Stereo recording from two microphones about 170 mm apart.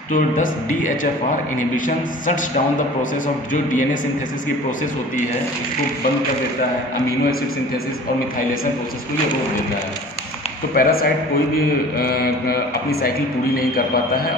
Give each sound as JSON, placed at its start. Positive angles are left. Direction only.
{"t": 0.1, "sound": "a man's voice", "side_deg": 50}
{"t": 2.2, "sound": "a man's voice", "side_deg": 50}
{"t": 10.7, "sound": "mantra", "side_deg": 60}
{"t": 13.6, "sound": "mantra", "side_deg": 60}